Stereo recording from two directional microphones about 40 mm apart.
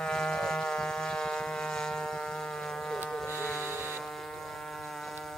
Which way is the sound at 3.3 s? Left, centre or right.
Left.